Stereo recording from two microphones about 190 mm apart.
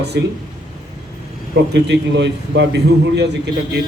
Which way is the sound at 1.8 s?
65° right (ahead or behind).